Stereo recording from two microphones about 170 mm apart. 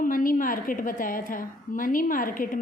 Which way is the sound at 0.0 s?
55° left (ahead or behind).